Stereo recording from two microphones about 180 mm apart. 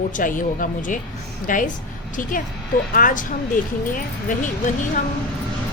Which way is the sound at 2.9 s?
50° left (ahead or behind).